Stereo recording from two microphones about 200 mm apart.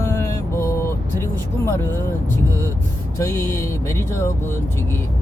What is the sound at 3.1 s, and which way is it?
Speech, 15° left (ahead or behind).